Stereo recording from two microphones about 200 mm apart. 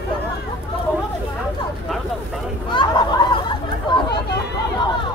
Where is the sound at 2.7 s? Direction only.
25° left (ahead or behind).